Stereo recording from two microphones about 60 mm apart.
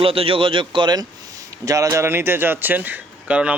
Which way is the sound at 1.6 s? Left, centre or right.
Right.